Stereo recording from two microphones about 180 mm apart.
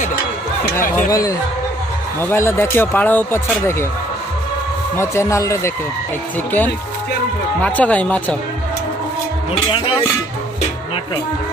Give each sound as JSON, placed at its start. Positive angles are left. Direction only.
{"t": 0.7, "sound": "speech", "side_deg": 15}
{"t": 4.9, "sound": "speech", "side_deg": 15}
{"t": 7.6, "sound": "speech", "side_deg": 10}
{"t": 9.5, "sound": "speech", "side_deg": 30}